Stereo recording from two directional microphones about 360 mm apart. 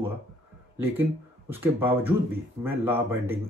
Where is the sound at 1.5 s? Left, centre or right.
Centre.